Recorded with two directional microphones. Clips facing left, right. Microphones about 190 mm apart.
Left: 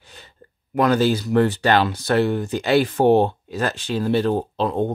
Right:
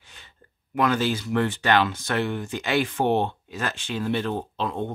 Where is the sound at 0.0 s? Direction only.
40° left (ahead or behind).